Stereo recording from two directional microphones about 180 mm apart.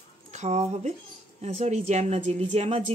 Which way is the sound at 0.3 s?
40° right (ahead or behind).